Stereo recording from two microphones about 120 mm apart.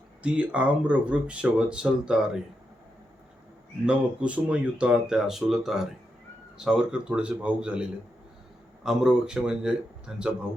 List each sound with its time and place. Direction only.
0.2 s speech: 10° right (ahead or behind)
3.8 s speech: 10° right (ahead or behind)